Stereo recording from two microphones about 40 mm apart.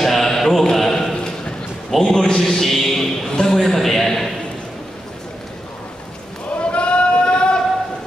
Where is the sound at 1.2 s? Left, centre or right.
Left.